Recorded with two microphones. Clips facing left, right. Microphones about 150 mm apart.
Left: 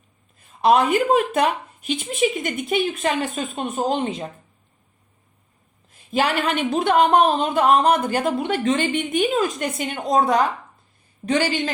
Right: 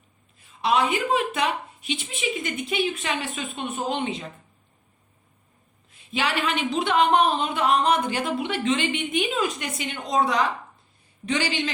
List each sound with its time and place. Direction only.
0.6 s speech: 50° left (ahead or behind)
5.9 s speech: 45° left (ahead or behind)